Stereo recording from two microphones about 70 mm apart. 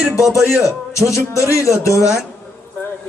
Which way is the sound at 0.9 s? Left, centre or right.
Left.